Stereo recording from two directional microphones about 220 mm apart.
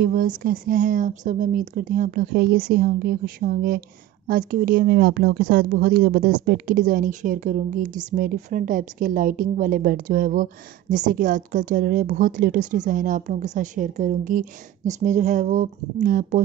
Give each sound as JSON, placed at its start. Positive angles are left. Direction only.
{"t": 0.0, "sound": "speech", "side_deg": -40}